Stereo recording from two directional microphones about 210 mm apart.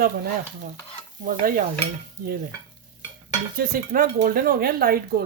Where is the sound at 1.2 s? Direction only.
40° right (ahead or behind).